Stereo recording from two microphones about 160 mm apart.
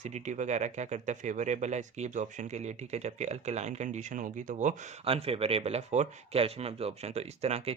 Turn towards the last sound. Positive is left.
turn(degrees=-40)  # may be behind; listen again after turning